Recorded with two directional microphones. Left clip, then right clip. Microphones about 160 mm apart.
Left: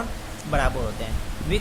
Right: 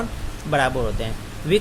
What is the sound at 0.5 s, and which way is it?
Speech, 20° right (ahead or behind).